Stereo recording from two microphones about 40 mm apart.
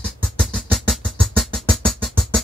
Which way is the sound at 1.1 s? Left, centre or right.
Centre.